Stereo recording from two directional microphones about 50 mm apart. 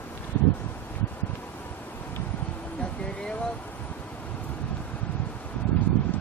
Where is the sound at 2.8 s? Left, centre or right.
Left.